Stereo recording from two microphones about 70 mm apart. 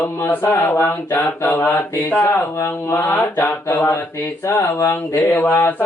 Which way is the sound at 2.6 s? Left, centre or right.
Left.